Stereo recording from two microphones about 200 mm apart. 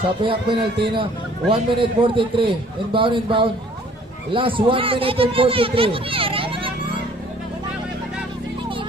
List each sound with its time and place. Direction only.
0.2 s a man's voice: 25° right (ahead or behind)